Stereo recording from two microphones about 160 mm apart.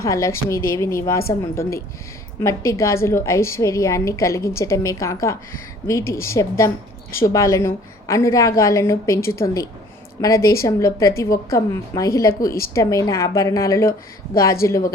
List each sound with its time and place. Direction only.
0.0 s a woman's voice: 20° left (ahead or behind)